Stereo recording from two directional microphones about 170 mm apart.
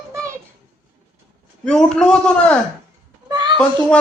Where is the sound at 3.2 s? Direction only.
25° right (ahead or behind).